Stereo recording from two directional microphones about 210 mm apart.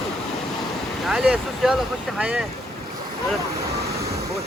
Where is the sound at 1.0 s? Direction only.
Centre (ahead or behind).